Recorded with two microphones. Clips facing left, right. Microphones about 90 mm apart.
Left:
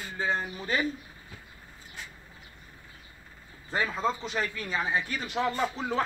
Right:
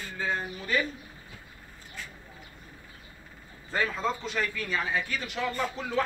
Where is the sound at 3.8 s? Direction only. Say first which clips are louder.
Left 3 dB; 10° left (ahead or behind).